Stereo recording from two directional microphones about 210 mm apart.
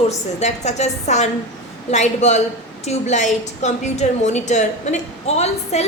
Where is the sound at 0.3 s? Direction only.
30° left (ahead or behind).